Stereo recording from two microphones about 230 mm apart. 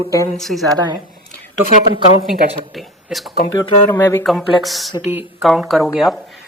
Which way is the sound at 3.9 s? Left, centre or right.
Centre.